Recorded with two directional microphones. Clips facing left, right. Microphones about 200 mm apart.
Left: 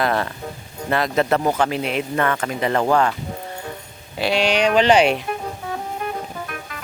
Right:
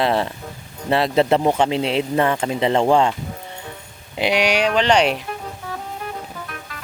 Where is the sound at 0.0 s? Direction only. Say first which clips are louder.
Right 2 dB; 25° right (ahead or behind).